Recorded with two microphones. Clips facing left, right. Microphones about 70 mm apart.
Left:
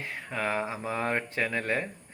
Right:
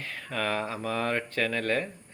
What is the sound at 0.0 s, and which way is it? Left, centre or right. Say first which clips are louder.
Speech: even; left.